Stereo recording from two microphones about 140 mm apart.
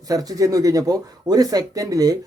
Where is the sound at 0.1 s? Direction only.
25° right (ahead or behind).